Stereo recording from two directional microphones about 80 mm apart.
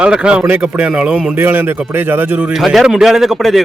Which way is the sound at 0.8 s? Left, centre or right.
Centre.